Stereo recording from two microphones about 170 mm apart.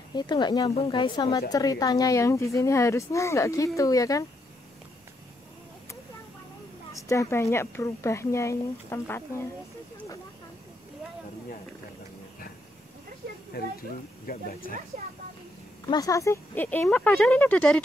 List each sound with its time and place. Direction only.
0.1 s speech: 25° left (ahead or behind)
7.0 s speech: 20° left (ahead or behind)
13.5 s speech: 65° left (ahead or behind)
15.9 s speech: 20° left (ahead or behind)